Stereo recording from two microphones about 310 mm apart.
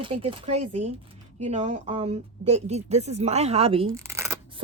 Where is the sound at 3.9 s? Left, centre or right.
Centre.